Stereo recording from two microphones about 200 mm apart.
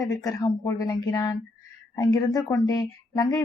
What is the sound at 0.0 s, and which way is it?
A woman's voice, 20° left (ahead or behind).